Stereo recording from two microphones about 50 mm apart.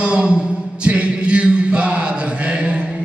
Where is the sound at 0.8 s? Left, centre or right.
Right.